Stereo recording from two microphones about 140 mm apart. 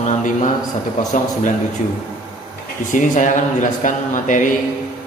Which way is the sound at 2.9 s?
65° left (ahead or behind).